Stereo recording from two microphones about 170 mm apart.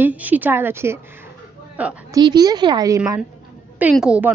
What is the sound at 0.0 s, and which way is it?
A woman's voice, 10° right (ahead or behind).